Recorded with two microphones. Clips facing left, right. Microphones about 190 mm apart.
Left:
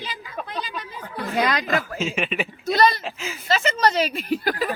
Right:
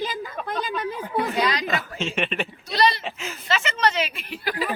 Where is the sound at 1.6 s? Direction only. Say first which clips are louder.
Left 3 dB; centre (ahead or behind).